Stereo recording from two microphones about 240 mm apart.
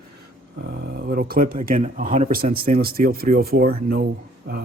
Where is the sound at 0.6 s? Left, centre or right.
Right.